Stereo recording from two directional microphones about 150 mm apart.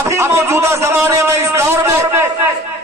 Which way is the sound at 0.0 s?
20° right (ahead or behind).